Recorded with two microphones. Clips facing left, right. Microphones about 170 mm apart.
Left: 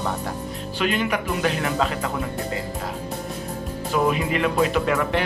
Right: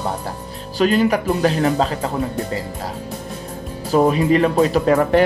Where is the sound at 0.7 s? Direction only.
35° right (ahead or behind).